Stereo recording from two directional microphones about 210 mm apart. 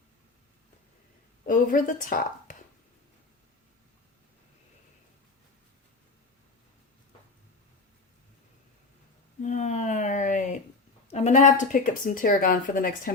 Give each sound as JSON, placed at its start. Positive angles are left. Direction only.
{"t": 1.5, "sound": "a woman's voice", "side_deg": 40}
{"t": 9.4, "sound": "a sound", "side_deg": 35}
{"t": 11.1, "sound": "a woman's voice", "side_deg": 35}